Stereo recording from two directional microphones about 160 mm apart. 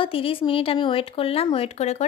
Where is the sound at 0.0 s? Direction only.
35° left (ahead or behind).